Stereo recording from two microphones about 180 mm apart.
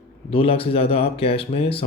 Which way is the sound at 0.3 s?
30° left (ahead or behind).